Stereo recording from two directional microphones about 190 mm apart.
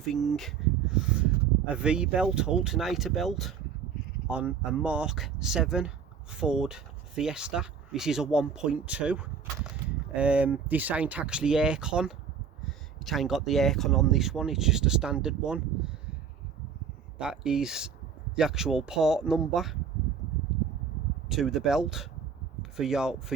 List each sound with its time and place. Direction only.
0.0 s speech: centre (ahead or behind)
17.2 s speech: 5° right (ahead or behind)
21.2 s speech: centre (ahead or behind)